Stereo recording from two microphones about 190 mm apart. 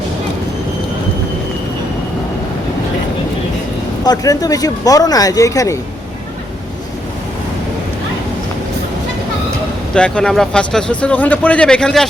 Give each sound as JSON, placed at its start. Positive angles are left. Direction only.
{"t": 4.0, "sound": "speech", "side_deg": 20}
{"t": 9.9, "sound": "speech", "side_deg": 5}